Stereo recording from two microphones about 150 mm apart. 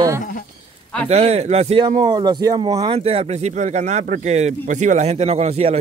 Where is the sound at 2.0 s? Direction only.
30° right (ahead or behind).